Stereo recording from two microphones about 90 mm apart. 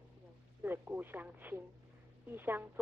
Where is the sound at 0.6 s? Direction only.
20° right (ahead or behind).